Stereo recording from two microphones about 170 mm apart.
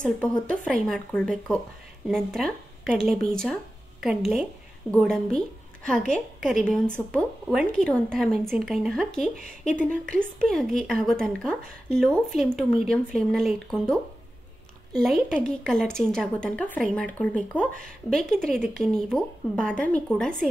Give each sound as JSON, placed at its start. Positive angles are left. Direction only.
{"t": 0.7, "sound": "a woman's voice", "side_deg": 5}
{"t": 4.9, "sound": "a woman's voice", "side_deg": 5}
{"t": 9.3, "sound": "speech", "side_deg": 45}
{"t": 10.0, "sound": "a woman's voice", "side_deg": -55}
{"t": 10.4, "sound": "a woman's voice", "side_deg": 0}
{"t": 15.0, "sound": "a woman's voice", "side_deg": 0}